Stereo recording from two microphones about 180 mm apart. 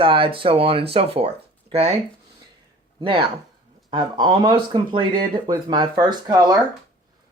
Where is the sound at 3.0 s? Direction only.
25° right (ahead or behind).